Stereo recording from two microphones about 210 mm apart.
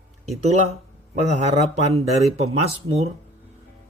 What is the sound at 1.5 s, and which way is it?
Speech, 30° right (ahead or behind).